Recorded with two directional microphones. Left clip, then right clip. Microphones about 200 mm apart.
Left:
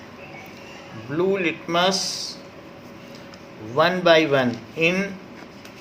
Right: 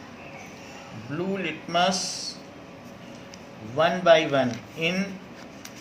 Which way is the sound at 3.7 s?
45° left (ahead or behind).